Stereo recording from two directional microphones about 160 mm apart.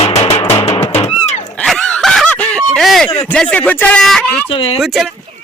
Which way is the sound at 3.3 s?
10° left (ahead or behind).